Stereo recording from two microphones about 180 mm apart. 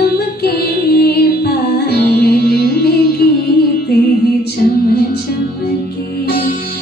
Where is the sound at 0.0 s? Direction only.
60° left (ahead or behind).